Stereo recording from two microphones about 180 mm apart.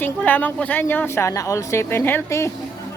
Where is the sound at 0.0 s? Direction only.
10° left (ahead or behind).